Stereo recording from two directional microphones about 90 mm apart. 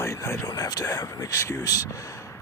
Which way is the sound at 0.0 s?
35° left (ahead or behind).